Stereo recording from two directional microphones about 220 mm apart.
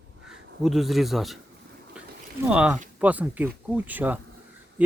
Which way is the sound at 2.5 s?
5° right (ahead or behind).